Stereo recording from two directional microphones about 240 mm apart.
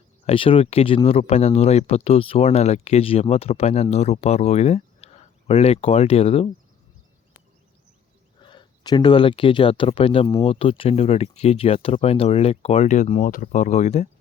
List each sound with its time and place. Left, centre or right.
0.3 s speech: left
8.4 s speech: centre